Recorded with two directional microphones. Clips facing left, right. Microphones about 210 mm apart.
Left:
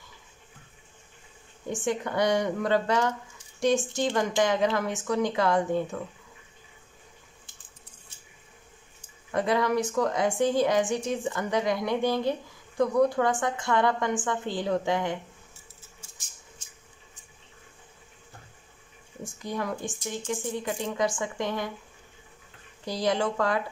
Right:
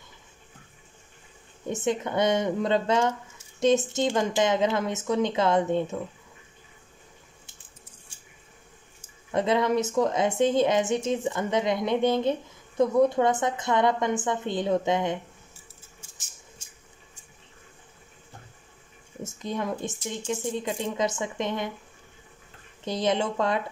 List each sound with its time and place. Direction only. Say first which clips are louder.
1.7 s a woman's voice: right 2 dB; 20° right (ahead or behind)
9.3 s a woman's voice: right 2 dB; 20° right (ahead or behind)
19.2 s a woman's voice: right 2 dB; 20° right (ahead or behind)
22.8 s a woman's voice: right 1 dB; 20° right (ahead or behind)